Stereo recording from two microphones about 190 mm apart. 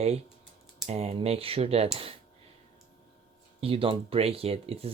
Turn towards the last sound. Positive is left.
turn(degrees=-30)  # may be behind; listen again after turning